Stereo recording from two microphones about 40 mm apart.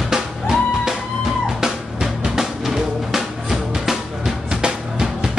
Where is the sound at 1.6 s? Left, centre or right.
Centre.